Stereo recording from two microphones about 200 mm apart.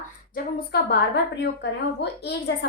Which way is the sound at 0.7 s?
55° left (ahead or behind).